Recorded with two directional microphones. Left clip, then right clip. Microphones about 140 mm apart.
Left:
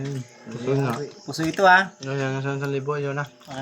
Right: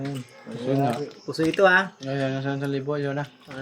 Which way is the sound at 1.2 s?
50° left (ahead or behind).